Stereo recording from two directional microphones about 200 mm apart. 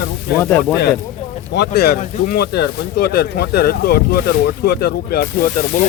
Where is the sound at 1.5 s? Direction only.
55° left (ahead or behind).